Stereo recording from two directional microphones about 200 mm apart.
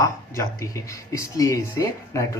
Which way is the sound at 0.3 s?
15° left (ahead or behind).